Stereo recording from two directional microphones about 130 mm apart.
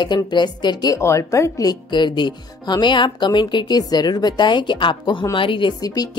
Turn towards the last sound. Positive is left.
turn(degrees=30)  # may be behind; listen again after turning